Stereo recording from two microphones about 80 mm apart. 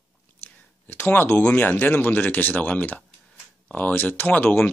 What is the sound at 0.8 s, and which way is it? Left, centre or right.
Speech, left.